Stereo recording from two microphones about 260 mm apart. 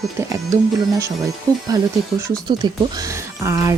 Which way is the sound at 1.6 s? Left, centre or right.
Centre.